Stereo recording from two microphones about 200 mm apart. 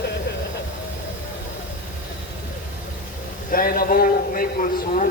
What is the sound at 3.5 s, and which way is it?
A man's voice, 45° left (ahead or behind).